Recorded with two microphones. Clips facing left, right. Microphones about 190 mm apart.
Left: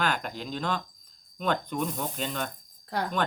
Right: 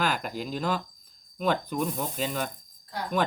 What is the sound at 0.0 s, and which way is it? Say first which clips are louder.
Speech: right 1 dB; 5° right (ahead or behind).